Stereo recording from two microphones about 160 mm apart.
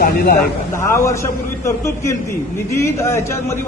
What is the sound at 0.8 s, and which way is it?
A man's voice, 20° left (ahead or behind).